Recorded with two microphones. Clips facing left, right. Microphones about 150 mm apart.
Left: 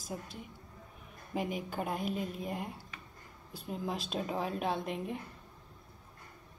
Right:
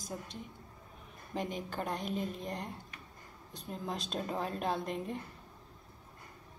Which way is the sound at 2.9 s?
90° left.